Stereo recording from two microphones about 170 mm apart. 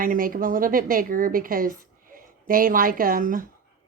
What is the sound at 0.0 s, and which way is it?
A woman's voice, 55° right (ahead or behind).